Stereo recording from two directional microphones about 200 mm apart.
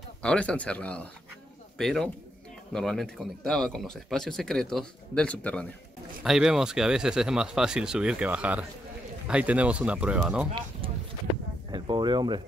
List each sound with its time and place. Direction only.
0.2 s speech: 5° left (ahead or behind)
10.8 s a sound: 25° right (ahead or behind)
11.7 s speech: 20° right (ahead or behind)